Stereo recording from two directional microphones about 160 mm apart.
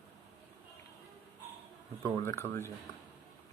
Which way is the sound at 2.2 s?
15° left (ahead or behind).